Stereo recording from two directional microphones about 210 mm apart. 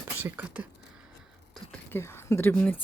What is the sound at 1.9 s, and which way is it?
Speech, 10° left (ahead or behind).